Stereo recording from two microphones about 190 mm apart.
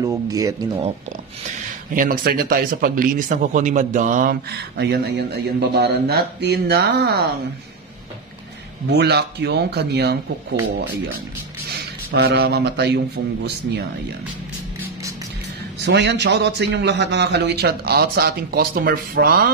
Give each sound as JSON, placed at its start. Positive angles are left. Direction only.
{"t": 0.0, "sound": "speech", "side_deg": -20}
{"t": 2.0, "sound": "speech", "side_deg": -50}
{"t": 8.8, "sound": "speech", "side_deg": -60}
{"t": 11.7, "sound": "a man's voice", "side_deg": -55}
{"t": 15.8, "sound": "speech", "side_deg": -65}